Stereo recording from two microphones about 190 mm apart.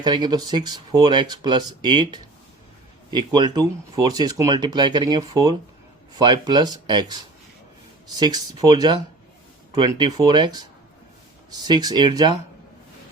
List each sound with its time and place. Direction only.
0.0 s speech: 20° right (ahead or behind)